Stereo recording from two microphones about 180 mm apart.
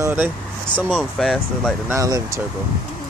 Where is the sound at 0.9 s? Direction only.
Centre (ahead or behind).